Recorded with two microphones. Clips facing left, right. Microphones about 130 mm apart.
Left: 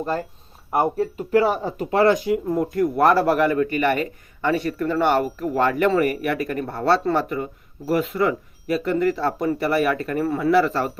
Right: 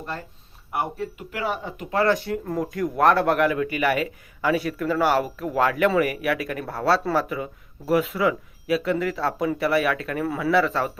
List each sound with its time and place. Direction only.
0.7 s speech: 40° left (ahead or behind)
2.1 s speech: 10° left (ahead or behind)